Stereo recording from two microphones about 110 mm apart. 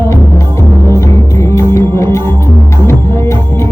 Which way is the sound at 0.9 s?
25° left (ahead or behind).